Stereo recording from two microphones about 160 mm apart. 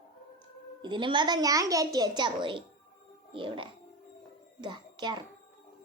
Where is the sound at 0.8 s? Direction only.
30° right (ahead or behind).